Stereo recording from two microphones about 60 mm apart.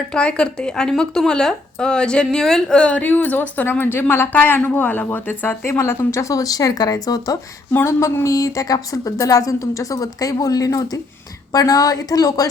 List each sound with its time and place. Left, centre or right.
0.1 s a woman's voice: centre; by 7.3 s left
7.9 s a sound: left
8.2 s a woman's voice: left
9.1 s a woman's voice: left
11.5 s a woman's voice: left